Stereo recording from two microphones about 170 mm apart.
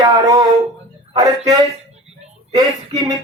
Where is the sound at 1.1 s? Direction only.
20° right (ahead or behind).